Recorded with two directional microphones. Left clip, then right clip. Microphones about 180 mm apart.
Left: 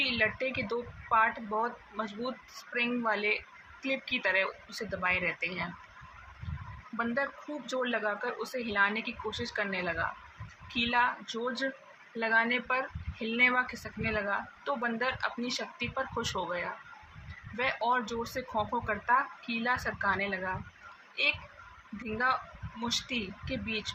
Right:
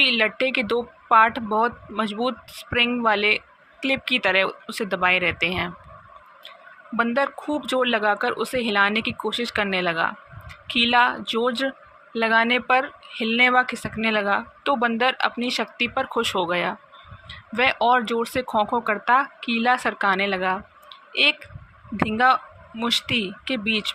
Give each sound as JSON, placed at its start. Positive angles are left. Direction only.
{"t": 0.0, "sound": "speech", "side_deg": -50}
{"t": 6.9, "sound": "speech", "side_deg": -50}
{"t": 22.8, "sound": "speech", "side_deg": -50}